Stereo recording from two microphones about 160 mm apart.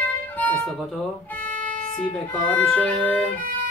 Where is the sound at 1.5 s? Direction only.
55° right (ahead or behind).